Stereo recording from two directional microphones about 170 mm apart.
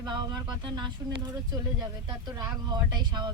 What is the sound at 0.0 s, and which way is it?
Speech, 25° right (ahead or behind).